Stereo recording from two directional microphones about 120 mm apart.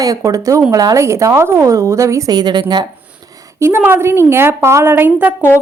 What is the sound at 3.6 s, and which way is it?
A woman's voice, 20° right (ahead or behind).